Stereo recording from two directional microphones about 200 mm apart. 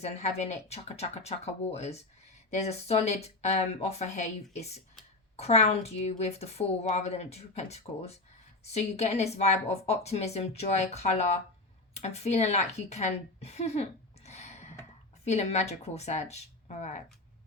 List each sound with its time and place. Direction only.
0.0 s a woman's voice: 35° left (ahead or behind)
14.3 s a sound: 35° left (ahead or behind)
15.2 s a woman's voice: 35° left (ahead or behind)